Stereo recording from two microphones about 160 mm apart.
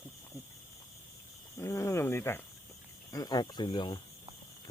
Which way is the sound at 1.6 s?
15° left (ahead or behind).